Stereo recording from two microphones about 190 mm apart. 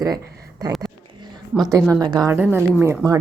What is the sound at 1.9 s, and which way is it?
Speech, 20° right (ahead or behind).